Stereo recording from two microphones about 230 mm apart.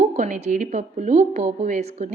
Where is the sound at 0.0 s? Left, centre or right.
Right.